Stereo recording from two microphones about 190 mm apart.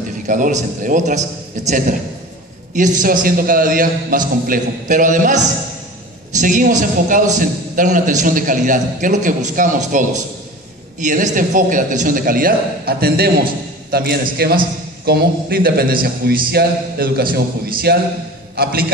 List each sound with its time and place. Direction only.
0.3 s a man's voice: 40° right (ahead or behind)